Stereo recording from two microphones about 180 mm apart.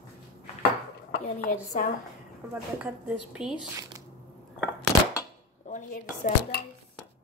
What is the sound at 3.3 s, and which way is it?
Speech, 5° right (ahead or behind).